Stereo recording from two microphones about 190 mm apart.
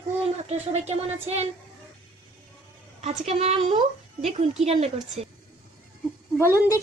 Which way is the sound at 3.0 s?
35° right (ahead or behind).